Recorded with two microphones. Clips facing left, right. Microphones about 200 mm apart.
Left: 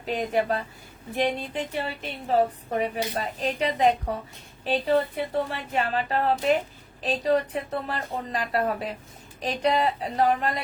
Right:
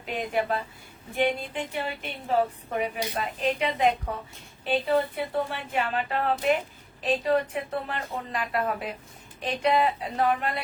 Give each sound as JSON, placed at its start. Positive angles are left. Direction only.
{"t": 0.0, "sound": "speech", "side_deg": 35}